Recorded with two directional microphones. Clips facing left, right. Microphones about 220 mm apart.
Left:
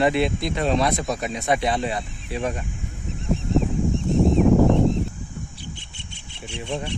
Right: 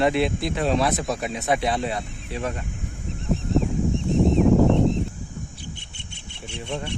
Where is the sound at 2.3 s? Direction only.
15° left (ahead or behind).